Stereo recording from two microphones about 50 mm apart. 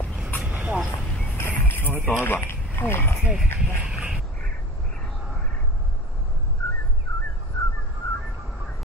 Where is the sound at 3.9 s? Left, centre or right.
Right.